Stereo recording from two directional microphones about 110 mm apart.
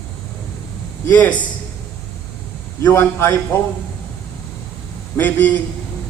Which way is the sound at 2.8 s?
20° left (ahead or behind).